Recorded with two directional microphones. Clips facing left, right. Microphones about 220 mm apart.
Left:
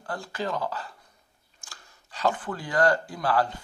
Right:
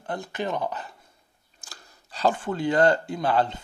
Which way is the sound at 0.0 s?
20° right (ahead or behind).